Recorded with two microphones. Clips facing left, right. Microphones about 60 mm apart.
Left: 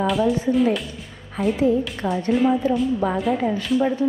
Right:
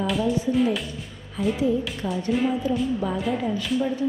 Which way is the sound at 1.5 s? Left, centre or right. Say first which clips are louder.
Left 4 dB; left.